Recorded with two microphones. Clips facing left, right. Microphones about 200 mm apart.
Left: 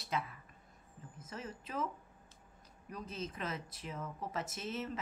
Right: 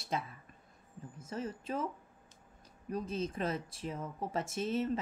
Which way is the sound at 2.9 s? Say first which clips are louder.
Right 7 dB; 30° right (ahead or behind).